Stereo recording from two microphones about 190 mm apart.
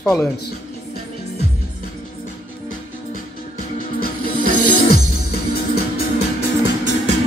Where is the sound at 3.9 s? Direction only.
50° left (ahead or behind).